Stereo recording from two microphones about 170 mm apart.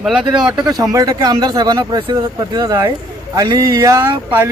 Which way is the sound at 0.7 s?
20° right (ahead or behind).